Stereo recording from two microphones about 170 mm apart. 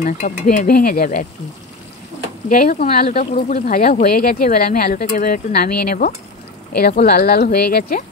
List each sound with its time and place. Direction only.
0.0 s speech: 50° left (ahead or behind)
2.5 s speech: 50° left (ahead or behind)
6.8 s speech: 70° left (ahead or behind)